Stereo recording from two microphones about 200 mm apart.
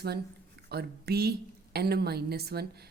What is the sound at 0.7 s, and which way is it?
A woman's voice, 50° right (ahead or behind).